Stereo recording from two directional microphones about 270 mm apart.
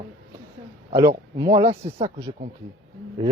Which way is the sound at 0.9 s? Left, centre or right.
Centre.